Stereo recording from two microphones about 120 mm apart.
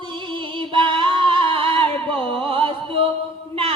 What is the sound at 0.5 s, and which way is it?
Music, 45° right (ahead or behind).